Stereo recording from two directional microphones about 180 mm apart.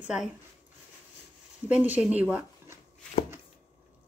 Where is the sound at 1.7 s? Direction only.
10° right (ahead or behind).